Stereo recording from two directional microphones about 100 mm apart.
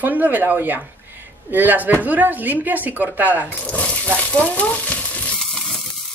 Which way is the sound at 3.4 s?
15° left (ahead or behind).